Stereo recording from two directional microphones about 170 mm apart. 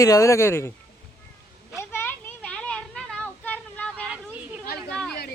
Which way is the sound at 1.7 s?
15° left (ahead or behind).